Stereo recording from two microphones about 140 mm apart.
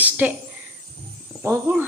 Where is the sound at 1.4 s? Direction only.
15° right (ahead or behind).